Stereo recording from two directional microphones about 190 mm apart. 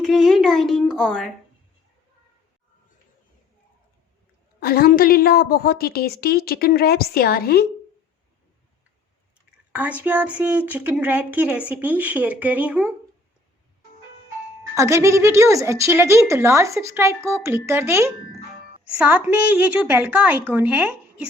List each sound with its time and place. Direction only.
0.0 s a child's voice: centre (ahead or behind)
4.6 s a woman's voice: 50° left (ahead or behind)
10.0 s a woman's voice: 5° right (ahead or behind)
14.8 s a woman's voice: 15° right (ahead or behind)